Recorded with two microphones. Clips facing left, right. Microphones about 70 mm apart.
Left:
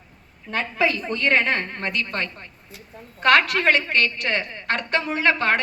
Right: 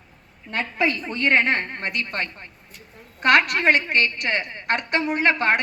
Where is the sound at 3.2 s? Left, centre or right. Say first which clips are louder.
Even; centre.